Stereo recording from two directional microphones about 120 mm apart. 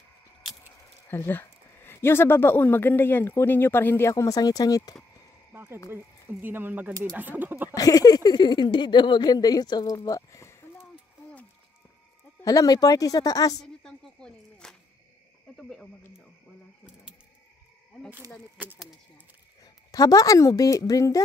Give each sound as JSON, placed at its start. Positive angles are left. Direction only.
{"t": 1.0, "sound": "speech", "side_deg": 15}
{"t": 5.5, "sound": "a sound", "side_deg": -20}
{"t": 5.9, "sound": "speech", "side_deg": -20}
{"t": 7.7, "sound": "speech", "side_deg": 30}
{"t": 9.9, "sound": "a sound", "side_deg": 30}
{"t": 12.4, "sound": "speech", "side_deg": 30}
{"t": 13.6, "sound": "a sound", "side_deg": 5}
{"t": 15.5, "sound": "speech", "side_deg": 5}
{"t": 19.6, "sound": "a woman's voice", "side_deg": 30}